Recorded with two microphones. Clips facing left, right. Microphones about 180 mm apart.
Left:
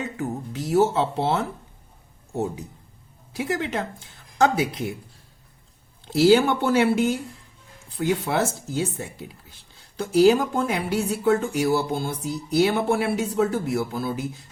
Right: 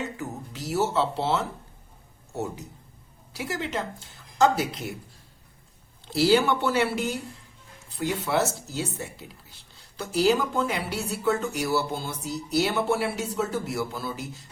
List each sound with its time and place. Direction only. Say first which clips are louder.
0.2 s speech: left 6 dB; 50° left (ahead or behind)
3.3 s speech: left 4 dB; 55° left (ahead or behind)
6.1 s speech: left 4 dB; 50° left (ahead or behind)